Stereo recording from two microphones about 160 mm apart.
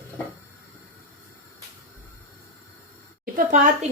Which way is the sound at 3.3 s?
55° right (ahead or behind).